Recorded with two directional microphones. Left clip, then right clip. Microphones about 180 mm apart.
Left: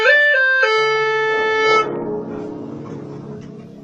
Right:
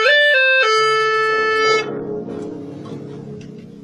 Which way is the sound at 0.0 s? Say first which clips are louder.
Even; 55° right (ahead or behind).